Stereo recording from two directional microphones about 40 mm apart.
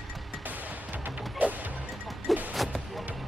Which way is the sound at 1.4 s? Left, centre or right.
Right.